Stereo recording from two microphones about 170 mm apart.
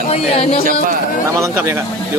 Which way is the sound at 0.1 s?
35° left (ahead or behind).